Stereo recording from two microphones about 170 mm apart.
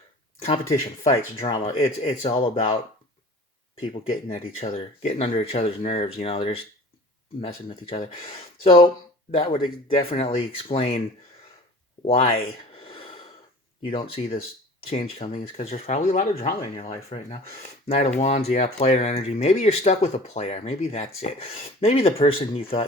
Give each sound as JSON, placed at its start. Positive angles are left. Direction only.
{"t": 0.3, "sound": "speech", "side_deg": 40}
{"t": 12.0, "sound": "a sound", "side_deg": 35}
{"t": 13.8, "sound": "speech", "side_deg": 35}